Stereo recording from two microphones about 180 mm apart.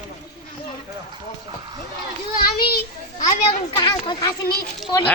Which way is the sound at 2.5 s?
60° left (ahead or behind).